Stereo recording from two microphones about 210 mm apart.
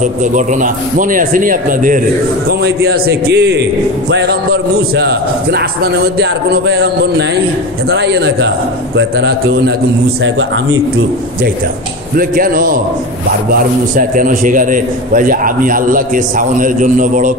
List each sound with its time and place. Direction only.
0.2 s a man's voice: 40° right (ahead or behind); by 9.6 s 55° right (ahead or behind)
12.2 s a man's voice: 40° right (ahead or behind)